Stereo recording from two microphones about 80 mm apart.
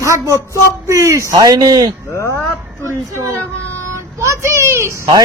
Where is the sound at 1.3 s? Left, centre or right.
Right.